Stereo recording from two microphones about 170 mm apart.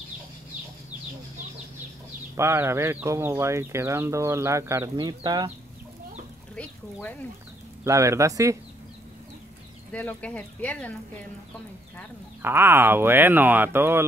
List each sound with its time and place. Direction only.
2.3 s speech: 15° right (ahead or behind)
6.5 s speech: 10° left (ahead or behind)
7.8 s speech: 15° right (ahead or behind)
9.9 s speech: 10° left (ahead or behind)
12.4 s speech: 15° right (ahead or behind)